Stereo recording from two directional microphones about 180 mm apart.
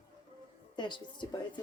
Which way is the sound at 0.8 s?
25° left (ahead or behind).